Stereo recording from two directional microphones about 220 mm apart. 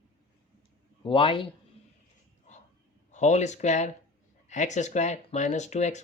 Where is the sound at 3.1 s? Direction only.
30° left (ahead or behind).